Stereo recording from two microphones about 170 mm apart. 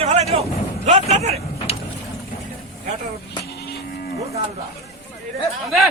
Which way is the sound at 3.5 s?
70° left (ahead or behind).